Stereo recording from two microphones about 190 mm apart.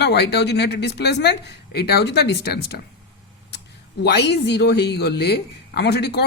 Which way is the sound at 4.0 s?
65° left (ahead or behind).